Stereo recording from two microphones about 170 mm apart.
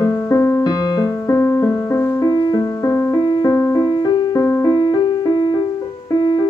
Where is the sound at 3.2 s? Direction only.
30° left (ahead or behind).